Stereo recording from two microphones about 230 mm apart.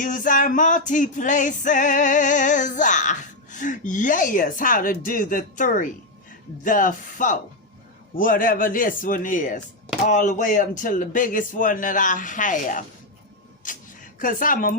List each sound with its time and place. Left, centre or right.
0.0 s music: left
13.6 s a sound: left
14.2 s music: left